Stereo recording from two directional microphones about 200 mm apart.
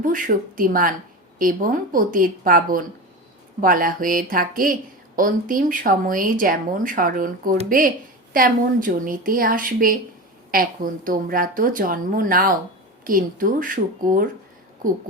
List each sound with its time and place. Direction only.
0.0 s speech: 40° right (ahead or behind)